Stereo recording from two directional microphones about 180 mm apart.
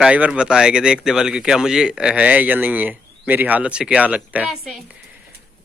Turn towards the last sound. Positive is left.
turn(degrees=-5)  # may be behind; listen again after turning